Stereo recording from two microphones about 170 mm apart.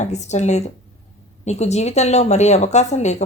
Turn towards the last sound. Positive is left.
turn(degrees=40)  # may be behind; listen again after turning